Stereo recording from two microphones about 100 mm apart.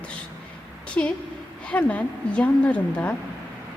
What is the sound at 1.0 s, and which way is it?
A woman's voice, 15° left (ahead or behind).